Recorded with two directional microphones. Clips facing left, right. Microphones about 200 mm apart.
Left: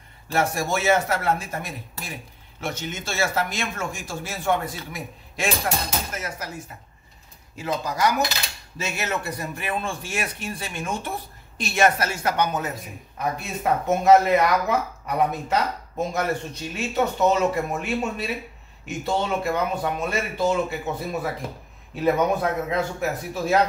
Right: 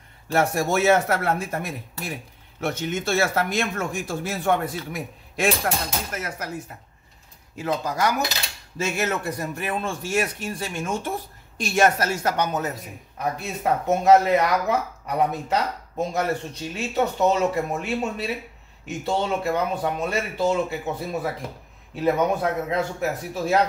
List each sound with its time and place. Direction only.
0.3 s speech: 55° right (ahead or behind)
7.5 s cutlery: 50° right (ahead or behind)
13.4 s a man's voice: 35° right (ahead or behind)